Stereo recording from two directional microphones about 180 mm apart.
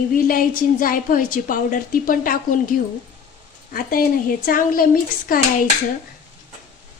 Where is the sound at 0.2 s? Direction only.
50° left (ahead or behind).